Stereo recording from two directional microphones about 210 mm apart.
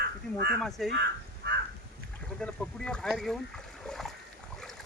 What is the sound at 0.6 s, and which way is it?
Speech, centre (ahead or behind).